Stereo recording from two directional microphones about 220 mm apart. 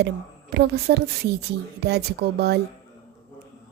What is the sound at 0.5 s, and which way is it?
A woman's voice, 45° right (ahead or behind).